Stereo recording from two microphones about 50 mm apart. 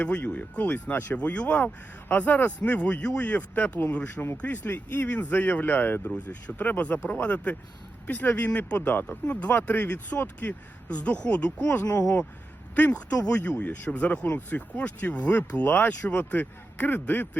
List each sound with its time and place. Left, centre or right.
0.0 s speech: left
1.1 s speech: left
5.1 s speech: left
5.7 s speech: left
6.1 s speech: left
8.8 s speech: left
9.0 s speech: left
10.8 s speech: left
15.6 s speech: left
16.0 s speech: left